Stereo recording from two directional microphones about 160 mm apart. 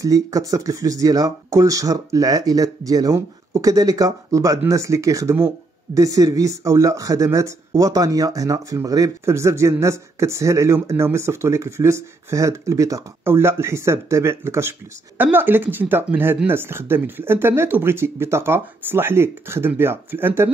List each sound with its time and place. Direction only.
0.0 s speech: 20° right (ahead or behind)